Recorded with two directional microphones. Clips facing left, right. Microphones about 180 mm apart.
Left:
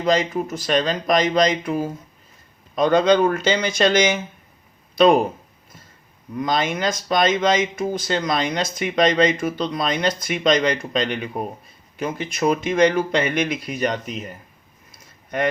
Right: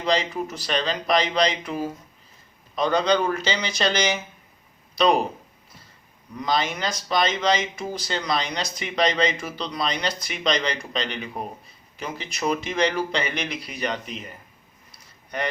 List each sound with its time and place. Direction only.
0.0 s speech: 45° left (ahead or behind)
6.4 s speech: 50° left (ahead or behind)
14.9 s a sound: 50° left (ahead or behind)